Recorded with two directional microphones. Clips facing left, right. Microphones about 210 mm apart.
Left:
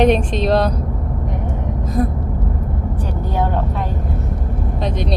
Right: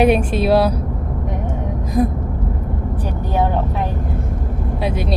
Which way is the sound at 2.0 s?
15° right (ahead or behind).